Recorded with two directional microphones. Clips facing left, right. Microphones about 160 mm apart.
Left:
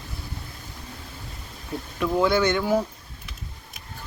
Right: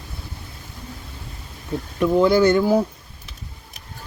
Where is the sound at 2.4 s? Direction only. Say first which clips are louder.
Right 6 dB; 35° right (ahead or behind).